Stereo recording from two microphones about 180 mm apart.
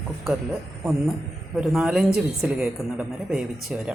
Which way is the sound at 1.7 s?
5° right (ahead or behind).